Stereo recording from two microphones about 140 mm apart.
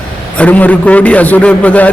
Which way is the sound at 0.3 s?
10° left (ahead or behind).